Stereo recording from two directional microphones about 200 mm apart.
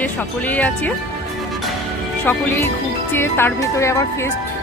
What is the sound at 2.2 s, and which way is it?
Speech, 10° left (ahead or behind).